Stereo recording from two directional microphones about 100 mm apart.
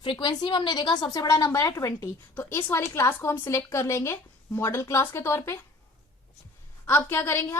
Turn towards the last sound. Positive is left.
turn(degrees=25)  # may be behind; listen again after turning